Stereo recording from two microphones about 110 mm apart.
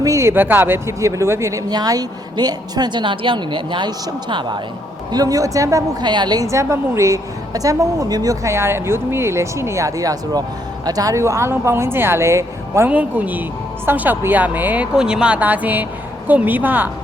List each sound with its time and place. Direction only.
0.0 s a woman's voice: 25° right (ahead or behind); by 4.5 s 45° right (ahead or behind)
5.1 s a woman's voice: 35° right (ahead or behind)
12.9 s speech: 15° right (ahead or behind)